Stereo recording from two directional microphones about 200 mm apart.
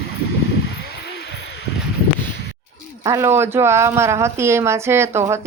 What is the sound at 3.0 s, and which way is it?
Speech, 15° right (ahead or behind).